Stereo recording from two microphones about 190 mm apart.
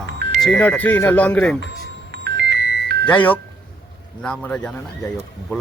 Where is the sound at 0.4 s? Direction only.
Centre (ahead or behind).